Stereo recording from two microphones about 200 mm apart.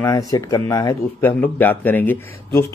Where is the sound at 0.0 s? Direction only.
15° left (ahead or behind).